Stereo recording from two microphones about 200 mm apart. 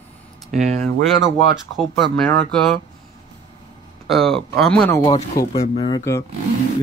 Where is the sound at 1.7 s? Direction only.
Centre (ahead or behind).